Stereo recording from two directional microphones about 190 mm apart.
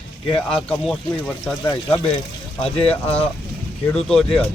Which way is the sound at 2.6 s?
30° left (ahead or behind).